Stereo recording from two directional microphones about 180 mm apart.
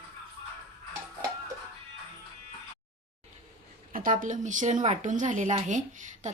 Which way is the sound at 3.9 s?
50° right (ahead or behind).